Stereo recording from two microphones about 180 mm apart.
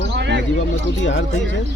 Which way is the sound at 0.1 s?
70° right (ahead or behind).